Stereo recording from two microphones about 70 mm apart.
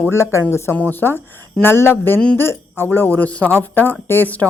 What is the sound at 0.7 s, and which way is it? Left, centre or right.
A woman's voice, left.